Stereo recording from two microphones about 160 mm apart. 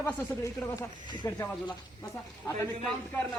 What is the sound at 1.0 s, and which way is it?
Speech, 30° left (ahead or behind).